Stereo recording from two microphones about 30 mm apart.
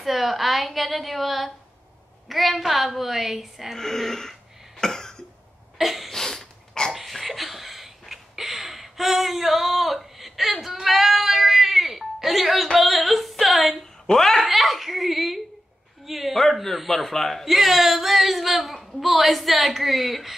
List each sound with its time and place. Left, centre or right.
0.0 s a woman's voice: centre
3.7 s throat clearing: centre
5.8 s cough: centre
6.1 s a sound: centre
6.9 s a sound: centre
14.0 s speech: centre
14.3 s chuckle: centre
16.1 s a sound: centre
16.6 s speech: centre
17.5 s a woman's voice: centre